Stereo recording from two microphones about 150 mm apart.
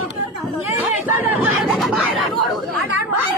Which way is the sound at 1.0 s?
10° right (ahead or behind).